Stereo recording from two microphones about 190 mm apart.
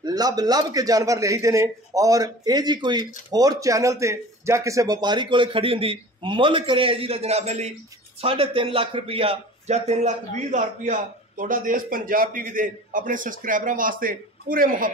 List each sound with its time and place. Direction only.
0.0 s a man's voice: 20° right (ahead or behind); by 14.9 s 50° right (ahead or behind)